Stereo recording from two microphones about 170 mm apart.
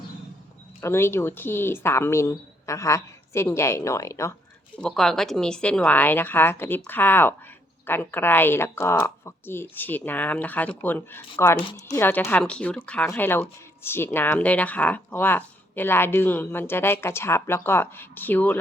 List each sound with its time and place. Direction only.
0.8 s speech: 15° left (ahead or behind)
4.8 s speech: 5° left (ahead or behind)